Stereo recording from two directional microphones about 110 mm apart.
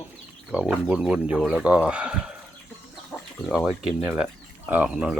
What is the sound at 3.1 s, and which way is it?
Chicken, 10° left (ahead or behind).